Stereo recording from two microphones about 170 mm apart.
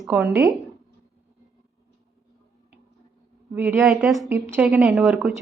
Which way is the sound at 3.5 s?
10° right (ahead or behind).